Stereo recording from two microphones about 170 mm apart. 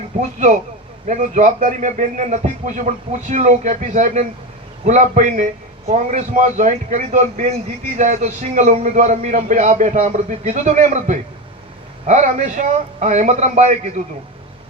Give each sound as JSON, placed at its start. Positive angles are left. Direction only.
{"t": 0.2, "sound": "speech", "side_deg": -45}